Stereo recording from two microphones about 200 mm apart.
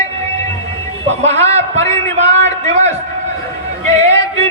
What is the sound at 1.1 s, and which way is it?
Speech, 35° right (ahead or behind).